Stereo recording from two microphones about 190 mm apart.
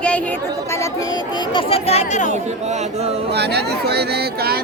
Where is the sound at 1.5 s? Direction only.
30° left (ahead or behind).